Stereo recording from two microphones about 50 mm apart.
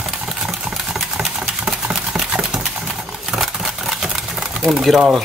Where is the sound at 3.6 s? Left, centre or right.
Centre.